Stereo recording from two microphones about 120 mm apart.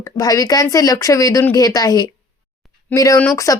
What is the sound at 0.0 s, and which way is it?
Speech, 30° left (ahead or behind).